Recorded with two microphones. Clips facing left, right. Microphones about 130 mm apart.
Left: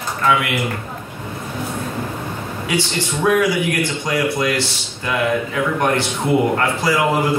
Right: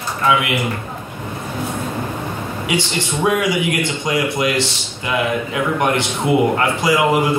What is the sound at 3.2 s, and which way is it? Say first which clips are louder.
A man's voice: left 2 dB; 20° right (ahead or behind).